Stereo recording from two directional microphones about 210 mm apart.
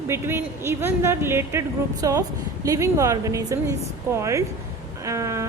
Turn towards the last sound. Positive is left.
turn(degrees=-15)  # may be behind; listen again after turning